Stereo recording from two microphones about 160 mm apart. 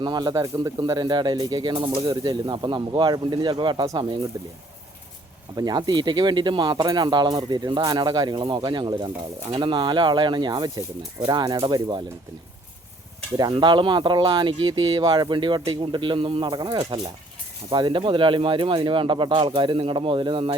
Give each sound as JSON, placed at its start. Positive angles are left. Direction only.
{"t": 0.0, "sound": "speech", "side_deg": -25}
{"t": 5.5, "sound": "speech", "side_deg": -25}
{"t": 13.3, "sound": "speech", "side_deg": -25}